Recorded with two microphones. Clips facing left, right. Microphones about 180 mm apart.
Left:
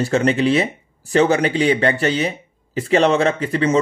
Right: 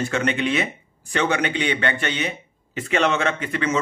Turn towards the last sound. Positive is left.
turn(degrees=35)  # may be behind; listen again after turning